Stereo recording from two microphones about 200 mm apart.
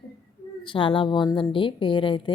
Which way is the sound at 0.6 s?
25° left (ahead or behind).